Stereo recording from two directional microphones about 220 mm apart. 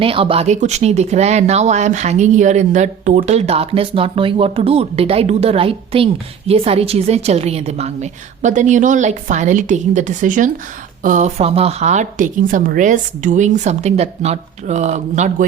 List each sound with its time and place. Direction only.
0.0 s speech: 25° right (ahead or behind)